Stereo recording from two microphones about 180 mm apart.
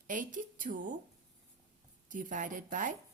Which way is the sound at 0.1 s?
45° right (ahead or behind).